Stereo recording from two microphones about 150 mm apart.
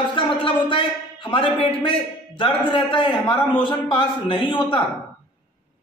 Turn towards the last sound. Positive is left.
turn(degrees=35)  # may be behind; listen again after turning